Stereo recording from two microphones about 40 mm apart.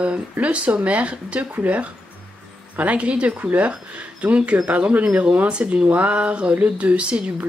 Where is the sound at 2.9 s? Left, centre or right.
Right.